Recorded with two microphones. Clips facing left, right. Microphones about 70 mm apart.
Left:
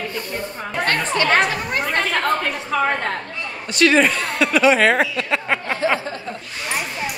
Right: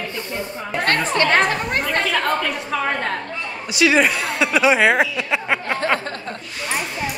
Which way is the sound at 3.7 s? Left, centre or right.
Centre.